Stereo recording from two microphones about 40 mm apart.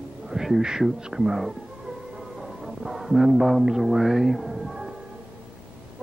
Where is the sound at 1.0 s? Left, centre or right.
Centre.